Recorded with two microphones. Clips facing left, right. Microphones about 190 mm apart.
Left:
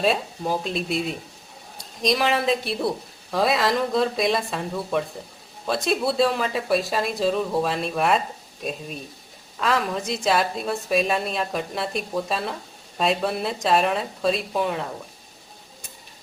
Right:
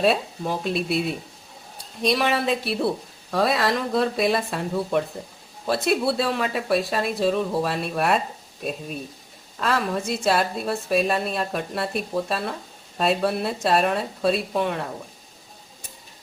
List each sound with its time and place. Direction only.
0.6 s speech: 5° right (ahead or behind)
9.6 s speech: centre (ahead or behind)